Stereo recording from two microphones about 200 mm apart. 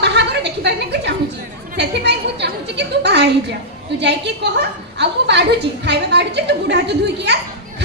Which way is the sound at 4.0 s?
60° right (ahead or behind).